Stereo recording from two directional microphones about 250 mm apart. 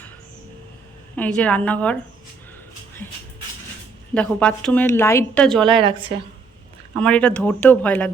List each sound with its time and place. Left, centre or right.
1.1 s speech: centre
4.1 s speech: centre
5.6 s a woman's voice: centre
7.0 s speech: centre